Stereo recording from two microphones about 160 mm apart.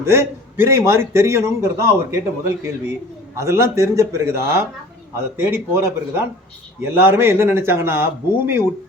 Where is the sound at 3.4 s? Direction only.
15° right (ahead or behind).